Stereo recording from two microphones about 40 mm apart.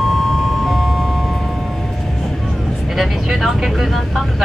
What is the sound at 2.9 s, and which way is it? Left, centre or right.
Vehicle, centre.